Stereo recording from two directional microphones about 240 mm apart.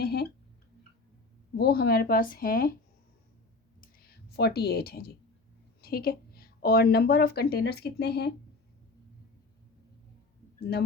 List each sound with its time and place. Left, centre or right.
0.0 s a sound: left
1.5 s speech: left
3.8 s clicking: left
5.8 s a woman's voice: left
10.6 s speech: left